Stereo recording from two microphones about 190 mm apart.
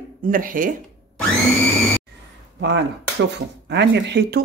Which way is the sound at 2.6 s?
65° right (ahead or behind).